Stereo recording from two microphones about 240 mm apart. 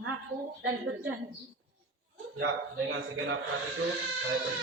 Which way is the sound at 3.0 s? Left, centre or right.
Right.